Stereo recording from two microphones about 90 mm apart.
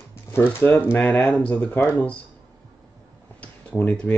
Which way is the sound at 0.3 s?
25° left (ahead or behind).